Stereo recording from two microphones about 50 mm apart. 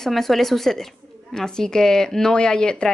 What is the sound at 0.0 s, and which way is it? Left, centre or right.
A woman's voice, centre.